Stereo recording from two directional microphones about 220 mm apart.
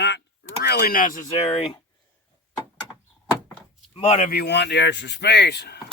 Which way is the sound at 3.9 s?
30° left (ahead or behind).